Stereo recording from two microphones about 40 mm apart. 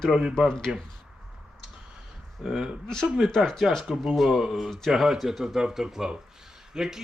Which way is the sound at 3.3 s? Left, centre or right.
Centre.